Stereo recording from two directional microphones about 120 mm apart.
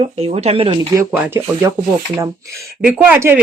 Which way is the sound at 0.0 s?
55° right (ahead or behind).